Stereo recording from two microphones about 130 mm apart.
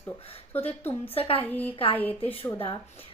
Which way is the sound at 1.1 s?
45° left (ahead or behind).